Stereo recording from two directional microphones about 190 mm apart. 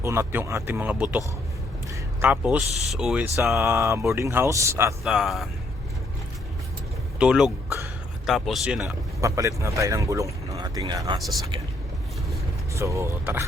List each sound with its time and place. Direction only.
0.0 s speech: 15° right (ahead or behind)
3.6 s speech: 15° right (ahead or behind)
5.0 s speech: centre (ahead or behind)
7.2 s speech: 5° right (ahead or behind)
9.2 s speech: 15° right (ahead or behind)
12.7 s speech: 15° right (ahead or behind)